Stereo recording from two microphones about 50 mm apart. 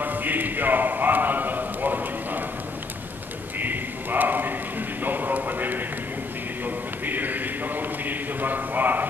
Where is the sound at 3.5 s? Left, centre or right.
Right.